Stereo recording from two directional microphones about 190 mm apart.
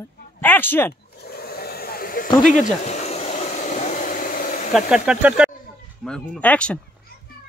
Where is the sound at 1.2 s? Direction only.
55° left (ahead or behind).